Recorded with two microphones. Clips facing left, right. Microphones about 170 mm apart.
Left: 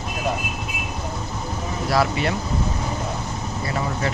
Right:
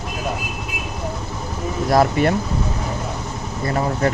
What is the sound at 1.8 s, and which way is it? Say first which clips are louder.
Speech: right 5 dB; 45° right (ahead or behind).